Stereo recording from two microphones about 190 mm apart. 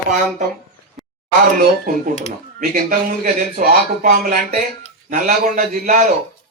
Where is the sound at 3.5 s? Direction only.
50° right (ahead or behind).